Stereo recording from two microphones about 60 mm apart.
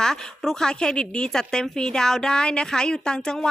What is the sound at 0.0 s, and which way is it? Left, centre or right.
A woman's voice, centre.